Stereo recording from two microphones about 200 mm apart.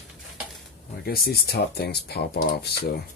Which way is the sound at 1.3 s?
55° left (ahead or behind).